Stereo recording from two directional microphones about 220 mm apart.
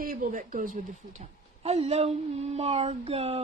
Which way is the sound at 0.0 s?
40° right (ahead or behind).